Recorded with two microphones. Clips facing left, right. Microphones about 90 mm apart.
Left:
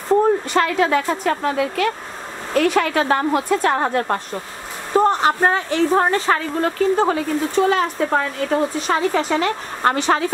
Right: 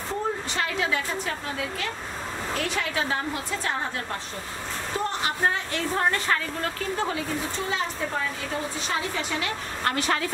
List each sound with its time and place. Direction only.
0.5 s speech: 50° left (ahead or behind)
4.9 s speech: 50° left (ahead or behind)
7.6 s speech: 65° left (ahead or behind)
9.8 s a woman's voice: 30° left (ahead or behind)